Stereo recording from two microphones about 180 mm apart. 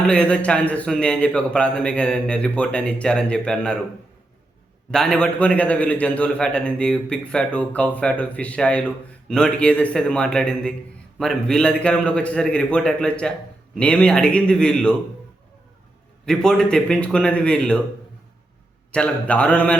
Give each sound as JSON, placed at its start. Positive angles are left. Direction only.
{"t": 0.1, "sound": "a man's voice", "side_deg": 5}
{"t": 4.9, "sound": "a man's voice", "side_deg": 5}
{"t": 16.2, "sound": "a man's voice", "side_deg": 5}
{"t": 18.9, "sound": "a man's voice", "side_deg": 5}